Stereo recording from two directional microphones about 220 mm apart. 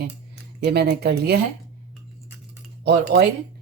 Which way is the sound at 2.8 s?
50° right (ahead or behind).